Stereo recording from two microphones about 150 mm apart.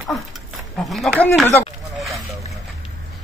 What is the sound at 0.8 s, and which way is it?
Speech, 5° left (ahead or behind).